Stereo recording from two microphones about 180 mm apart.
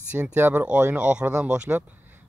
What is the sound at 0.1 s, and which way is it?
Speech, 10° right (ahead or behind).